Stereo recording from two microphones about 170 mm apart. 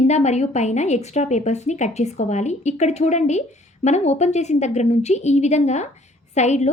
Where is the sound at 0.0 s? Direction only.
40° left (ahead or behind).